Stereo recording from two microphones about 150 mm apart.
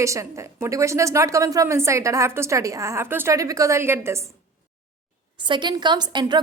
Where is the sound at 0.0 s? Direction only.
20° right (ahead or behind).